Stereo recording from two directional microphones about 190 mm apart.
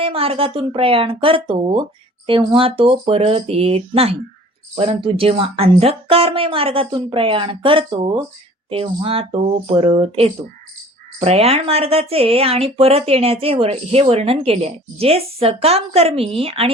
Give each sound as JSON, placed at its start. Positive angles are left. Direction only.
{"t": 0.0, "sound": "speech", "side_deg": -30}